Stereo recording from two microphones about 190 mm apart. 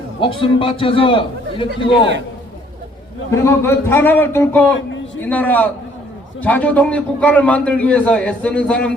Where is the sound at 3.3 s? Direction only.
15° left (ahead or behind).